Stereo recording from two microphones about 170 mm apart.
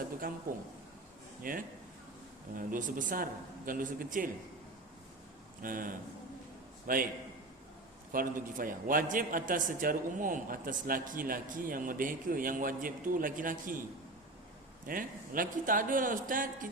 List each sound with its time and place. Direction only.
0.2 s a man's voice: 55° right (ahead or behind)
5.6 s a man's voice: 55° right (ahead or behind)
8.1 s a man's voice: 55° right (ahead or behind)
14.8 s a man's voice: 55° right (ahead or behind)